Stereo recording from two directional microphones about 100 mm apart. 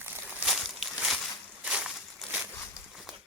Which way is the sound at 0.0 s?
20° right (ahead or behind).